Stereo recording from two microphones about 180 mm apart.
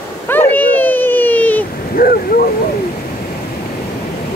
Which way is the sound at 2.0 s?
55° left (ahead or behind).